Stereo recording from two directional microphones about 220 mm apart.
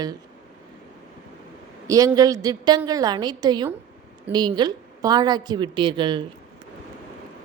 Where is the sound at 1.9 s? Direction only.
15° right (ahead or behind).